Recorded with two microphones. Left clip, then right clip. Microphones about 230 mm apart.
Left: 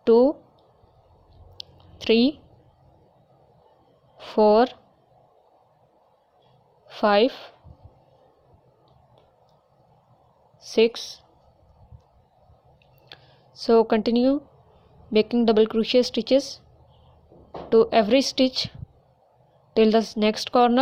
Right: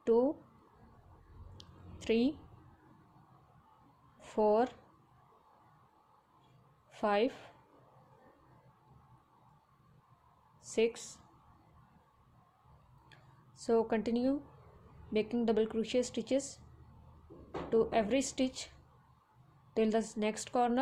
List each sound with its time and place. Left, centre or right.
0.0 s speech: left
2.0 s a woman's voice: left
4.2 s speech: left
6.9 s speech: left
10.6 s a woman's voice: left
13.1 s a sound: left
15.1 s speech: left
17.7 s speech: left
19.7 s speech: left